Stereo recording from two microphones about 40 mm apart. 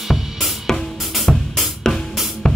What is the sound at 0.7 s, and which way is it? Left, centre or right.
Music, centre.